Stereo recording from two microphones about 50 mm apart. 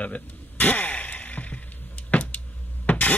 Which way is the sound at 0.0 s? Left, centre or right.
Left.